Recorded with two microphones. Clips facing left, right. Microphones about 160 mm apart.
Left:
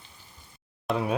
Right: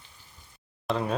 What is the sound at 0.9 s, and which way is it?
Speech, 5° left (ahead or behind).